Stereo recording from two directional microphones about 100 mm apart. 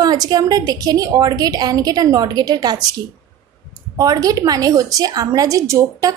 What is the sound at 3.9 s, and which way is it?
A woman's voice, 40° right (ahead or behind).